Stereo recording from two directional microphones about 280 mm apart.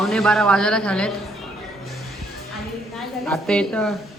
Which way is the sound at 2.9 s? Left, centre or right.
Centre.